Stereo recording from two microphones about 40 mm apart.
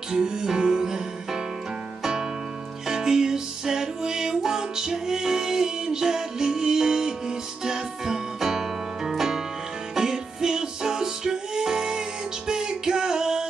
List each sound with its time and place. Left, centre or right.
0.1 s music: centre
2.9 s music: centre